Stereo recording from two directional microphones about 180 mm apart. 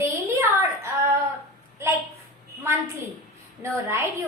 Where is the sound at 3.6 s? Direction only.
15° right (ahead or behind).